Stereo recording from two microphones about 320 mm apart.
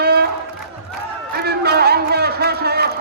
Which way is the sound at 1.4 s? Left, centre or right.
Right.